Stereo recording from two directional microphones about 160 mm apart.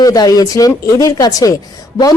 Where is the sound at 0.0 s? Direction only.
25° left (ahead or behind).